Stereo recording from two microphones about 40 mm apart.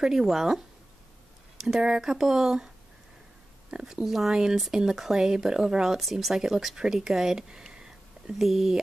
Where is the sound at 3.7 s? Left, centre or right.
Centre.